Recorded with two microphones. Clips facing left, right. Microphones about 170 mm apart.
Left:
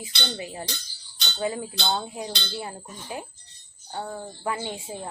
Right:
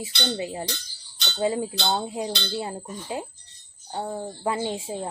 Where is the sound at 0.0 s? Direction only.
25° right (ahead or behind).